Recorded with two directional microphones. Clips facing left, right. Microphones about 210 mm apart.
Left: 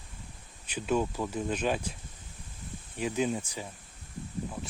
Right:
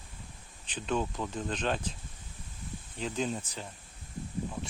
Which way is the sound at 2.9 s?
10° left (ahead or behind).